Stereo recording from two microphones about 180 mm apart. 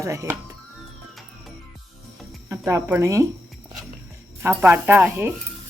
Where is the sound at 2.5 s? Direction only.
15° right (ahead or behind).